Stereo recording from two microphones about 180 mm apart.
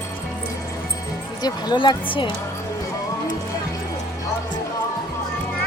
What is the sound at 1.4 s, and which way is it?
Speech, 20° left (ahead or behind).